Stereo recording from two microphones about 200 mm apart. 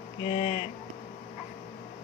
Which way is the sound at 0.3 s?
25° left (ahead or behind).